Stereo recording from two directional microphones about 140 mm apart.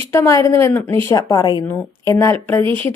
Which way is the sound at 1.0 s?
25° left (ahead or behind).